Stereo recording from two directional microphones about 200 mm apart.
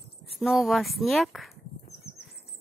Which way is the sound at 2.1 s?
30° left (ahead or behind).